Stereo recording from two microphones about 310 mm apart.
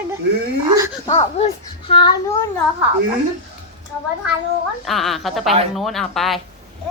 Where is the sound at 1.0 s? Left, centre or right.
Centre.